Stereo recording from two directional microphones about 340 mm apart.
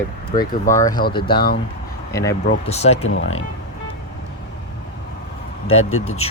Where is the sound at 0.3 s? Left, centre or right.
Left.